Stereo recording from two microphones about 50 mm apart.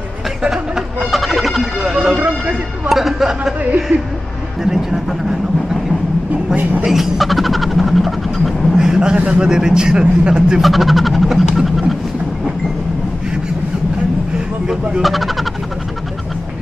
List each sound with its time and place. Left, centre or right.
0.4 s a sound: centre
1.1 s music: centre
2.9 s speech: centre
3.9 s speech: right
4.6 s a sound: centre
6.5 s speech: right
6.8 s a sound: centre
10.6 s speech: centre
15.0 s speech: centre